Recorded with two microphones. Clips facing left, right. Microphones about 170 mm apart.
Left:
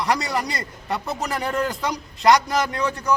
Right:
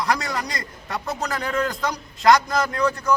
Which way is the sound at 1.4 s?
5° left (ahead or behind).